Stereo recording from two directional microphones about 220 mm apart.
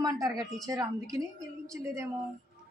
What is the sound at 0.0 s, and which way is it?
Speech, 15° right (ahead or behind).